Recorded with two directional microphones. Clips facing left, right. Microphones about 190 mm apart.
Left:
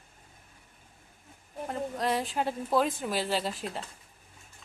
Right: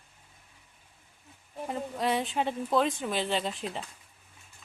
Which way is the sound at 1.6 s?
Centre (ahead or behind).